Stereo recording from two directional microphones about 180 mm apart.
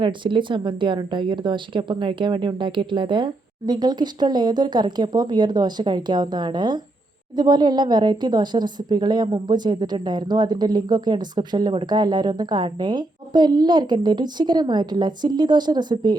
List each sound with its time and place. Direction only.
0.0 s a woman's voice: 25° right (ahead or behind)